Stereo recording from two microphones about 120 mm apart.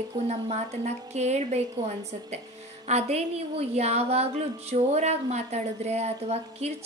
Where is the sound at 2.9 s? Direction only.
60° right (ahead or behind).